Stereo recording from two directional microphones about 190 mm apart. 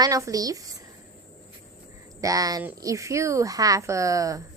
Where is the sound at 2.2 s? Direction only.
20° right (ahead or behind).